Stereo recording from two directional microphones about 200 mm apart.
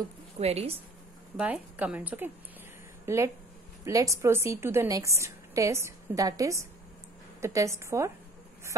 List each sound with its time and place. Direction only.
0.4 s speech: 30° right (ahead or behind)
1.4 s a woman's voice: 5° right (ahead or behind)